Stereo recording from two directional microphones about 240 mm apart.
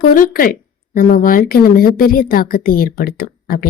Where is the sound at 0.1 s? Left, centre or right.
Left.